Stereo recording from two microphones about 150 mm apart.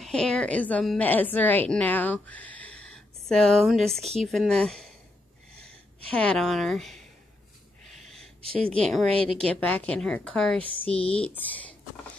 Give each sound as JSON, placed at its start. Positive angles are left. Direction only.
{"t": 0.0, "sound": "a woman's voice", "side_deg": 5}
{"t": 5.9, "sound": "a woman's voice", "side_deg": 10}
{"t": 8.5, "sound": "a woman's voice", "side_deg": 10}
{"t": 10.8, "sound": "speech", "side_deg": 40}
{"t": 11.1, "sound": "a woman's voice", "side_deg": 5}